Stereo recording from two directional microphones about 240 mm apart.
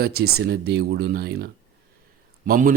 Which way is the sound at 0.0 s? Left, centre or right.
Right.